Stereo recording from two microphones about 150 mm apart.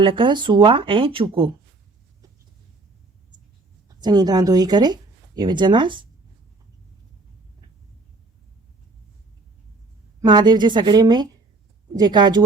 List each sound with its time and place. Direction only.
0.0 s speech: 35° right (ahead or behind)
3.8 s speech: 25° right (ahead or behind)
10.2 s a woman's voice: 30° right (ahead or behind)